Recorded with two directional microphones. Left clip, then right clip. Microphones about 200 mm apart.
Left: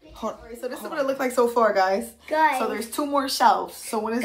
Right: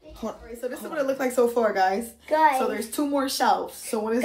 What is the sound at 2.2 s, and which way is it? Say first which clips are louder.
Speech: right 2 dB; 20° right (ahead or behind).